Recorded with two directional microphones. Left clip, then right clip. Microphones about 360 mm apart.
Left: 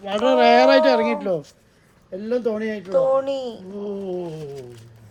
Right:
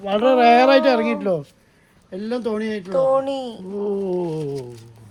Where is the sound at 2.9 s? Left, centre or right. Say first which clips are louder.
Even; centre.